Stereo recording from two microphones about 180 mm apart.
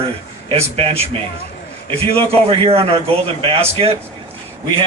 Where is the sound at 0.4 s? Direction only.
30° right (ahead or behind).